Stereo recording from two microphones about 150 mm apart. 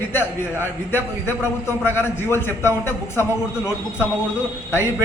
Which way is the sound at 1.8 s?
15° left (ahead or behind).